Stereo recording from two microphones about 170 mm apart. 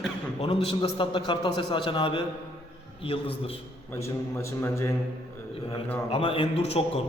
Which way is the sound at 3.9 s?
15° left (ahead or behind).